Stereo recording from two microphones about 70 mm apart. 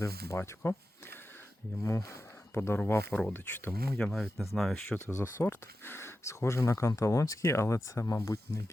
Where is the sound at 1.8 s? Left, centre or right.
Left.